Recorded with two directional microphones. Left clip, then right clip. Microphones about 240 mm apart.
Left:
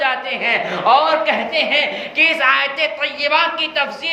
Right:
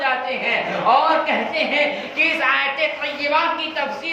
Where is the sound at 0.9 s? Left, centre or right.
Left.